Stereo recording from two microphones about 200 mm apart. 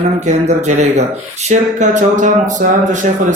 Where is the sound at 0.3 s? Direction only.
35° right (ahead or behind).